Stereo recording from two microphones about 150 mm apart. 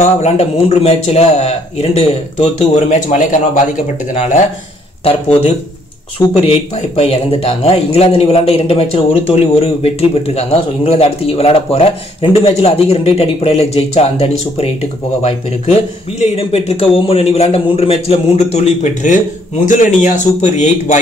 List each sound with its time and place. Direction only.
0.0 s a man's voice: 45° left (ahead or behind)
5.0 s a man's voice: 40° left (ahead or behind)